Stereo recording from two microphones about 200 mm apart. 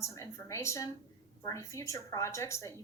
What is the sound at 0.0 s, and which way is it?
A woman's voice, 15° left (ahead or behind).